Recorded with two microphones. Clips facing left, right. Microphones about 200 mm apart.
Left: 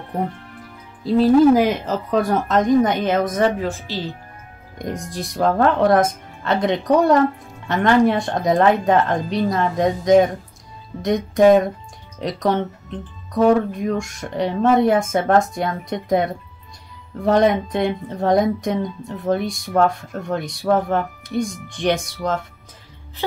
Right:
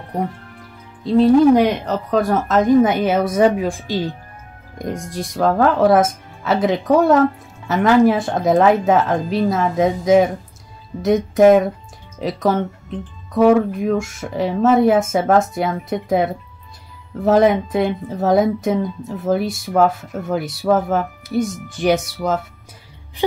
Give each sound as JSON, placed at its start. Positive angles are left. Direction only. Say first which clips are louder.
{"t": 1.0, "sound": "speech", "louder": "right 1 dB", "side_deg": 0}
{"t": 4.7, "sound": "speech", "louder": "right 2 dB", "side_deg": 0}